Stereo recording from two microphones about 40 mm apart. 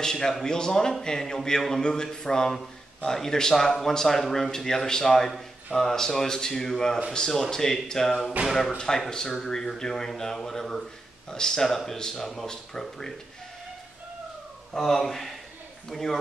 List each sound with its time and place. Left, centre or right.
0.0 s speech: centre
8.4 s speech: right
8.7 s speech: centre
14.8 s a man's voice: centre